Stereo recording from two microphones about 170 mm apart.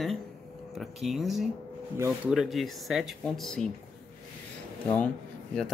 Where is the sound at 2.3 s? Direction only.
Centre (ahead or behind).